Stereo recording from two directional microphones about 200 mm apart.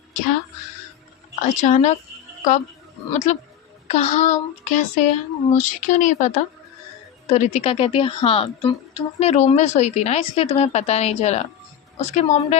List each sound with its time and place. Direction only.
1.5 s a woman's voice: 35° left (ahead or behind)
3.1 s a woman's voice: 35° left (ahead or behind)